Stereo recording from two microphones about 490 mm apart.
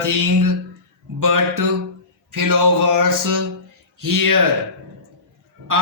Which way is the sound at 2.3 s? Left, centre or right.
Right.